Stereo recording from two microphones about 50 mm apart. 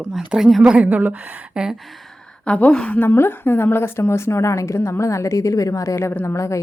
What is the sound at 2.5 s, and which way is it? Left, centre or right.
Speech, left.